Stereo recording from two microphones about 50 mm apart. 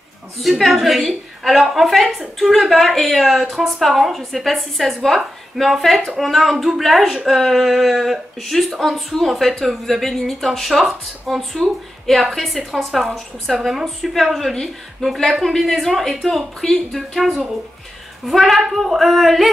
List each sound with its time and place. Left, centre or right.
0.4 s a woman's voice: centre